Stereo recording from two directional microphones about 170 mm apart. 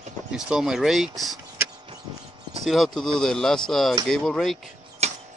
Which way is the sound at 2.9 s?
5° left (ahead or behind).